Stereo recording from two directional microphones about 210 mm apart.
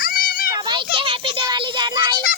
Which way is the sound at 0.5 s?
20° right (ahead or behind).